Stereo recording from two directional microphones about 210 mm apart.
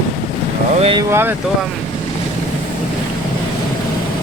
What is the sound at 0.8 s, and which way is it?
Speech, 25° right (ahead or behind).